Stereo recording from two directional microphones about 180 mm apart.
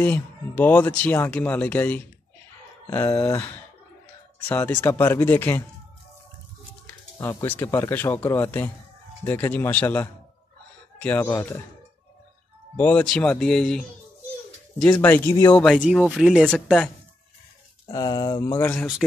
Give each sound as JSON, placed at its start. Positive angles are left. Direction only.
{"t": 0.0, "sound": "speech", "side_deg": 10}
{"t": 7.2, "sound": "speech", "side_deg": 10}
{"t": 12.7, "sound": "a man's voice", "side_deg": 10}
{"t": 14.9, "sound": "a man's voice", "side_deg": 10}
{"t": 17.8, "sound": "speech", "side_deg": 25}
{"t": 18.6, "sound": "speech", "side_deg": 10}